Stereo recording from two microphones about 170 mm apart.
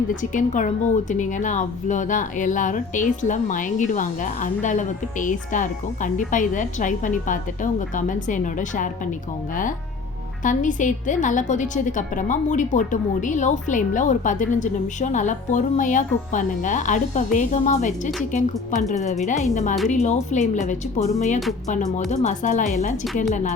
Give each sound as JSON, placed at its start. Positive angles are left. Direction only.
{"t": 0.1, "sound": "a woman's voice", "side_deg": 50}
{"t": 10.4, "sound": "a woman's voice", "side_deg": 50}